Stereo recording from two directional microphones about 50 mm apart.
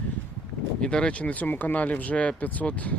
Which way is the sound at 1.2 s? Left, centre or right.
Left.